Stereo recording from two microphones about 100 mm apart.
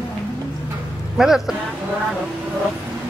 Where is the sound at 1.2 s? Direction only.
5° right (ahead or behind).